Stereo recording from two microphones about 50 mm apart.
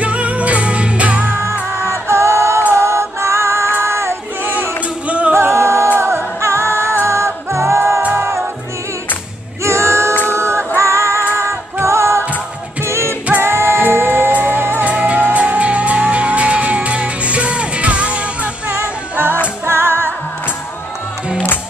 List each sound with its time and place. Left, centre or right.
0.0 s music: right
1.8 s music: right
3.8 s child singing: right
4.6 s music: right
5.3 s music: right
9.6 s a capella: right
10.2 s music: right
14.9 s music: right
19.6 s music: right